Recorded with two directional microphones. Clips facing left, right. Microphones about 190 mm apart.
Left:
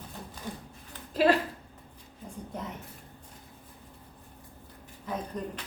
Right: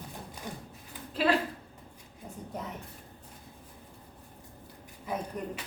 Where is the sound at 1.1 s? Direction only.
40° left (ahead or behind).